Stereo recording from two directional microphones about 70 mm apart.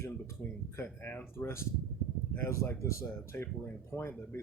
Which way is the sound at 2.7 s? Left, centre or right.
Left.